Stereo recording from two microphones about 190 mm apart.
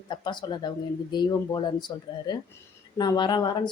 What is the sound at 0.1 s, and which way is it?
Speech, 25° left (ahead or behind).